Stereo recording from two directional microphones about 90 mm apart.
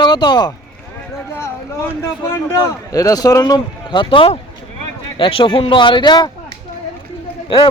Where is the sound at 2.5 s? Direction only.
40° left (ahead or behind).